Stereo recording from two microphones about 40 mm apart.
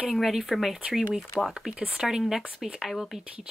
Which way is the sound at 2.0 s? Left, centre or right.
Centre.